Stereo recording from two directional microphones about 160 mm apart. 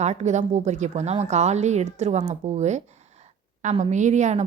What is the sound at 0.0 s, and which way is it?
A woman's voice, 45° right (ahead or behind).